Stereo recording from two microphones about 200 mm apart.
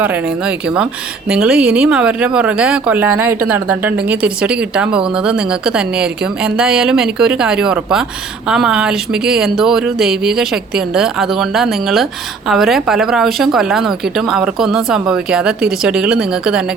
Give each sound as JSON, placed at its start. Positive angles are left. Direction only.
{"t": 0.0, "sound": "speech", "side_deg": -5}